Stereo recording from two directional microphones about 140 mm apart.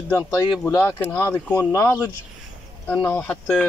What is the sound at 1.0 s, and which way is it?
Speech, 10° left (ahead or behind).